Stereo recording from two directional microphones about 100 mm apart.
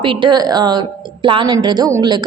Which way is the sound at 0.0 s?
55° right (ahead or behind).